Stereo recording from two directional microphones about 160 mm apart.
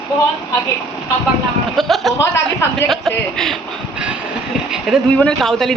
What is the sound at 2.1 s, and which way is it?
Speech, 15° left (ahead or behind).